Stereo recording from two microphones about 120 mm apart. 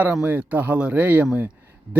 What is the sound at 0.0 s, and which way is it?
Speech, 10° right (ahead or behind).